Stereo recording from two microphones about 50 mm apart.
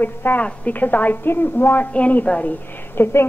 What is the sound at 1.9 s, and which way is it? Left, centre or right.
Speech, left.